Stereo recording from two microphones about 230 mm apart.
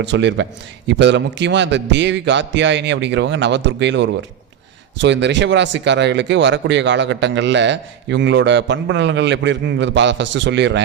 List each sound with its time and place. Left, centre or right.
0.0 s speech: right